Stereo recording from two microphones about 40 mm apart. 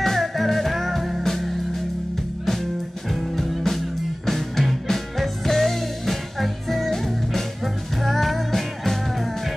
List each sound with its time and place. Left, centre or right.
0.0 s music: centre
3.1 s music: centre